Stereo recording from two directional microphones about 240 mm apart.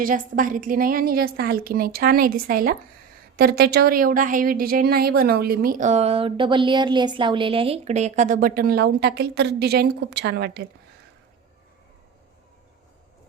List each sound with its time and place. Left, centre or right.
0.0 s a woman's voice: right